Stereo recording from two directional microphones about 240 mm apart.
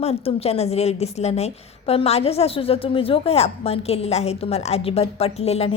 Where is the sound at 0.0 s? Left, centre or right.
Left.